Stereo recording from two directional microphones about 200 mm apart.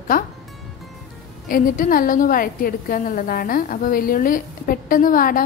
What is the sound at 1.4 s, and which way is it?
A woman's voice, 45° left (ahead or behind).